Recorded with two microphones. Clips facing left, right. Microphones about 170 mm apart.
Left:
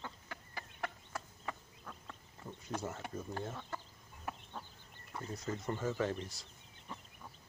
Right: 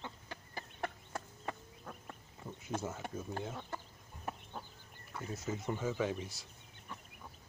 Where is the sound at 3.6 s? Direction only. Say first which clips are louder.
Right 1 dB; 25° right (ahead or behind).